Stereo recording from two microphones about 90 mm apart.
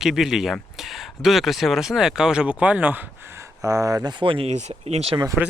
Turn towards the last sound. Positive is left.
turn(degrees=-40)  # may be behind; listen again after turning